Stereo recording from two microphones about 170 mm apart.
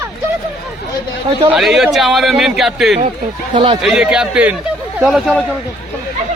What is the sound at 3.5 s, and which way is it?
Speech, 30° right (ahead or behind).